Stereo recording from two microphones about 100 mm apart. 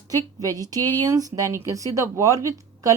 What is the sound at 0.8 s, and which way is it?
Speech, 20° left (ahead or behind).